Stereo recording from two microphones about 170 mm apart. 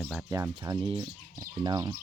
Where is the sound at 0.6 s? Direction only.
30° right (ahead or behind).